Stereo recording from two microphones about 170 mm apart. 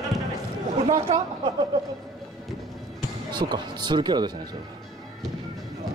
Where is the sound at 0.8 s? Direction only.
40° right (ahead or behind).